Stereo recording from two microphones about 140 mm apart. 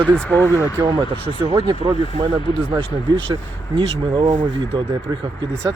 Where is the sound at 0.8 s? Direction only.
30° right (ahead or behind).